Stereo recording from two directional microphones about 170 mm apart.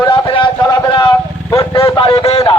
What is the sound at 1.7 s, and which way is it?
Speech, 30° left (ahead or behind).